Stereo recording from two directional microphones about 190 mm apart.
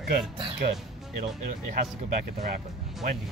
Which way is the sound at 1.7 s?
45° right (ahead or behind).